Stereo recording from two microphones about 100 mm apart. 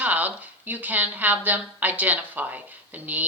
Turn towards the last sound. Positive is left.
turn(degrees=-15)  # may be behind; listen again after turning